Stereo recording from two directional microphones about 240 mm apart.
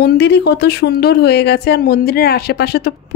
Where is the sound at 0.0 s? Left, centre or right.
Left.